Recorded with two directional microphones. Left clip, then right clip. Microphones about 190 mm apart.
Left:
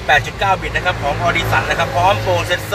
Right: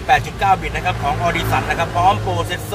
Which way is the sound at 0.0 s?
Centre (ahead or behind).